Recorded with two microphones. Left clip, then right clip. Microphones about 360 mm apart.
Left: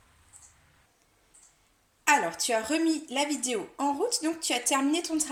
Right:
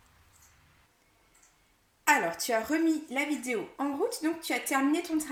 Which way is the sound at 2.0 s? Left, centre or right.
Centre.